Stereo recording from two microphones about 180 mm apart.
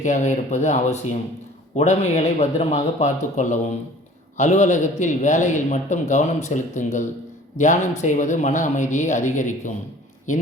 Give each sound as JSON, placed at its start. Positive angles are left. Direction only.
{"t": 0.0, "sound": "a man's voice", "side_deg": 40}